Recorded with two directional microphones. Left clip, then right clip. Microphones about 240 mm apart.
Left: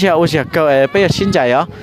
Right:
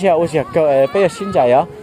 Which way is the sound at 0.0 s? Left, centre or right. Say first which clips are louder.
Left 1 dB; left.